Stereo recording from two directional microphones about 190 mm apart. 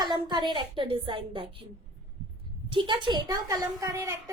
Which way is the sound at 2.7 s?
25° right (ahead or behind).